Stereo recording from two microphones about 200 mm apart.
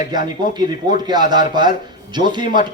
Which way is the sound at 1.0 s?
20° right (ahead or behind).